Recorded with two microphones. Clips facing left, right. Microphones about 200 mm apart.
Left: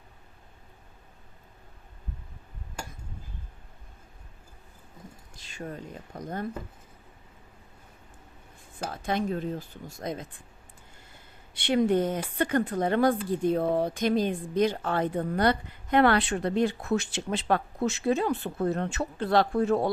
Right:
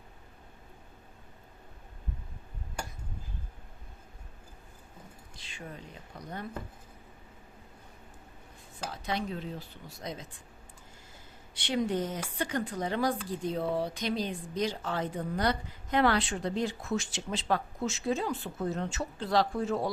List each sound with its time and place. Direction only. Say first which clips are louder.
5.4 s speech: left 7 dB; 45° left (ahead or behind)
8.9 s speech: left 6 dB; 50° left (ahead or behind)
11.5 s speech: left 7 dB; 60° left (ahead or behind)